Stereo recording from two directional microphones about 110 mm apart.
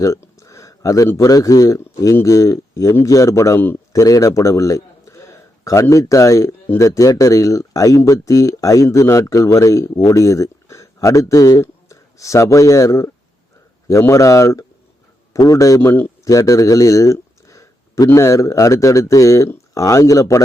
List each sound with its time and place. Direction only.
0.0 s a man's voice: 25° left (ahead or behind)